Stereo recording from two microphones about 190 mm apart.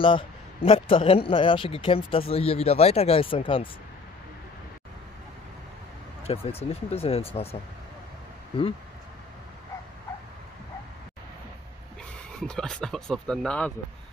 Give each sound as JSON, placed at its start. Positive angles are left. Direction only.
{"t": 0.0, "sound": "a man's voice", "side_deg": 30}
{"t": 6.2, "sound": "speech", "side_deg": 30}
{"t": 12.4, "sound": "speech", "side_deg": 5}